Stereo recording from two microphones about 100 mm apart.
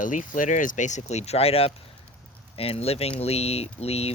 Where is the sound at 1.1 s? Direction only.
90° left.